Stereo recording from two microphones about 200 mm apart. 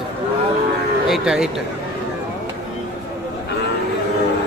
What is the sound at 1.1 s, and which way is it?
Speech, 5° right (ahead or behind).